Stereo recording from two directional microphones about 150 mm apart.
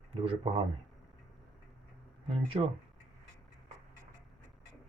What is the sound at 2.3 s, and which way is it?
Speech, 40° right (ahead or behind).